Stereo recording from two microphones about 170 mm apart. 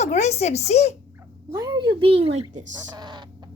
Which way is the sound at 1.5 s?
25° right (ahead or behind).